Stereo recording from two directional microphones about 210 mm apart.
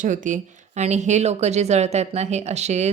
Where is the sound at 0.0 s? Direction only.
40° right (ahead or behind).